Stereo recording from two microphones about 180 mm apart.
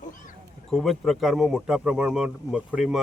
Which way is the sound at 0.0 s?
45° left (ahead or behind).